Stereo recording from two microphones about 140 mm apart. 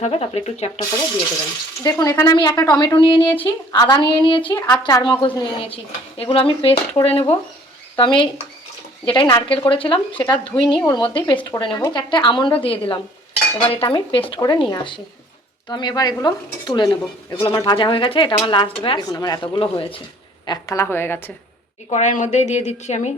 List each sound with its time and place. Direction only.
0.0 s speech: 50° left (ahead or behind)
1.8 s speech: 25° left (ahead or behind)
2.3 s a woman's voice: 30° left (ahead or behind)
14.3 s a woman's voice: 25° left (ahead or behind)
20.5 s a woman's voice: 20° left (ahead or behind)
21.8 s speech: 55° left (ahead or behind)